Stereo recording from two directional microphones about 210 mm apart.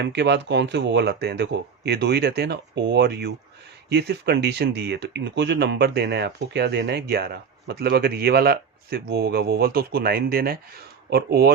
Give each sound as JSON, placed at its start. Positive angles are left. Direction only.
{"t": 0.0, "sound": "speech", "side_deg": -55}